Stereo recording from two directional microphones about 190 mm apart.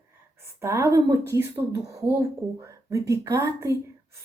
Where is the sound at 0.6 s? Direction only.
15° right (ahead or behind).